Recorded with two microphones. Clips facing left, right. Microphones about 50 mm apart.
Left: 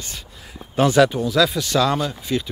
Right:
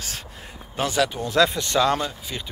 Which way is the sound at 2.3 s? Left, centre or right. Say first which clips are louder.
Left 10 dB; centre.